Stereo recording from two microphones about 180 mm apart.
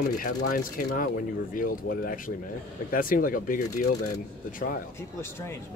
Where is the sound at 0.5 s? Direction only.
50° left (ahead or behind).